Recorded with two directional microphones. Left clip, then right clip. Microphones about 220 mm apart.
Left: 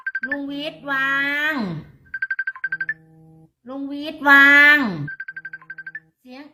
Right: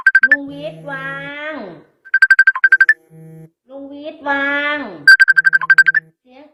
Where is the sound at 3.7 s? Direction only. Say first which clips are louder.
Even; 25° left (ahead or behind).